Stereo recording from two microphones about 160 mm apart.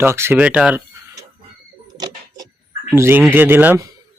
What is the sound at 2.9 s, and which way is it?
Speech, 15° right (ahead or behind).